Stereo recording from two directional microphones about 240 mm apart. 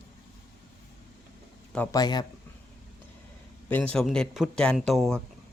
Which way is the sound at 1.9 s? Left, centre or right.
Centre.